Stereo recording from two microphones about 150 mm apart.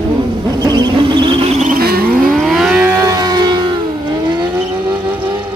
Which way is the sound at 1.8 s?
90° right.